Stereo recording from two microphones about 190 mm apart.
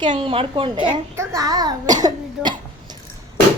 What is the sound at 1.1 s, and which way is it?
A woman's voice, 15° right (ahead or behind).